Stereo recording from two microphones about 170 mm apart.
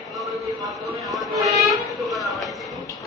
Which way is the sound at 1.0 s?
Centre (ahead or behind).